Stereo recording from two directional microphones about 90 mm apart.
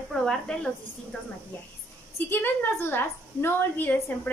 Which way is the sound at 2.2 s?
20° left (ahead or behind).